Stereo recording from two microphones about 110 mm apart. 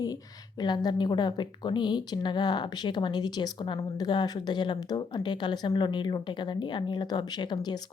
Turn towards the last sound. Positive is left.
turn(degrees=40)  # may be behind; listen again after turning